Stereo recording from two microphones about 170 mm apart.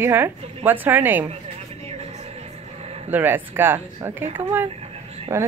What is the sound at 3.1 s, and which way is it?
A woman's voice, 10° right (ahead or behind).